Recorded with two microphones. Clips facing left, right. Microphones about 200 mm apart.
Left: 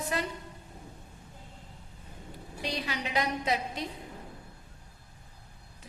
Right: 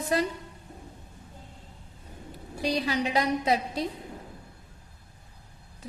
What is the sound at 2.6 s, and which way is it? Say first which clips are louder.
A woman's voice: right 8 dB; 35° right (ahead or behind).